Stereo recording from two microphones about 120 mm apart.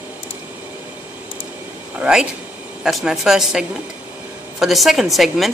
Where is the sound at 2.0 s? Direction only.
10° right (ahead or behind).